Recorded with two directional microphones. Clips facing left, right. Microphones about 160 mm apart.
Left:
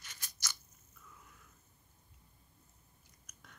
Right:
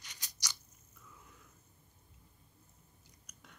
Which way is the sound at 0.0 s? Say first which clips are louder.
Left 1 dB; 15° right (ahead or behind).